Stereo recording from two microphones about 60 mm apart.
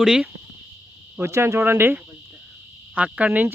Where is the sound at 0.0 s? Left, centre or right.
Centre.